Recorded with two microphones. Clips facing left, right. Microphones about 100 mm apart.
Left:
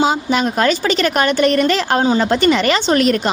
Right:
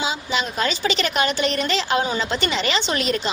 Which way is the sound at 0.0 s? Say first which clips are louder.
Left 9 dB; 50° left (ahead or behind).